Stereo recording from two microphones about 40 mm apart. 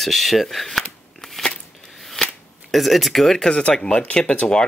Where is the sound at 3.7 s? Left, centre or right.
Left.